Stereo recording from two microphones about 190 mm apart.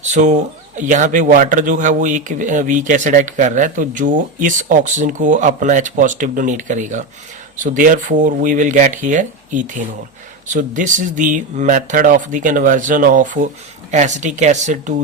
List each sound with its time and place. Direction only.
0.0 s speech: 40° right (ahead or behind)